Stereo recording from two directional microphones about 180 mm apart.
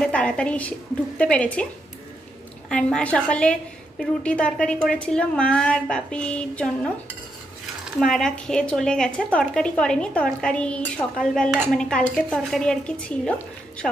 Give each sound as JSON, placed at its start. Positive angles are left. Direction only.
{"t": 0.0, "sound": "a woman's voice", "side_deg": 5}
{"t": 2.7, "sound": "a woman's voice", "side_deg": 5}
{"t": 8.0, "sound": "a woman's voice", "side_deg": 5}